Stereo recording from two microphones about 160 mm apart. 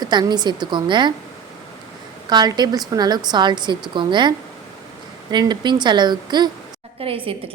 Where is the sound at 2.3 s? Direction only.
25° right (ahead or behind).